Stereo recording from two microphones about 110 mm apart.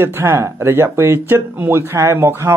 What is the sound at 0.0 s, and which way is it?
Speech, 25° right (ahead or behind).